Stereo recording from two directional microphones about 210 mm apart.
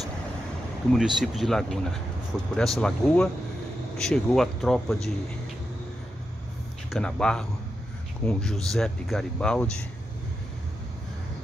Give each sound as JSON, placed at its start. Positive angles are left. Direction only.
{"t": 0.9, "sound": "speech", "side_deg": 0}
{"t": 6.9, "sound": "speech", "side_deg": 5}